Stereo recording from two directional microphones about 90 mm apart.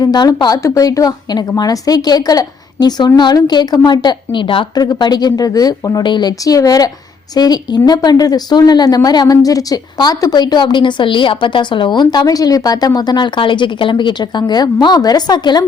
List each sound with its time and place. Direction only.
0.0 s a woman's voice: 45° left (ahead or behind); by 4.6 s 65° left (ahead or behind)
4.7 s a woman's voice: 45° left (ahead or behind)
6.0 s a woman's voice: 55° left (ahead or behind)